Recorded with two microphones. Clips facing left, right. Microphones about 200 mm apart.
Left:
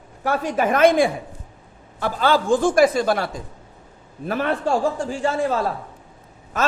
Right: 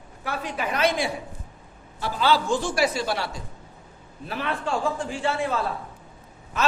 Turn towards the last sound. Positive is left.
turn(degrees=45)  # may be behind; listen again after turning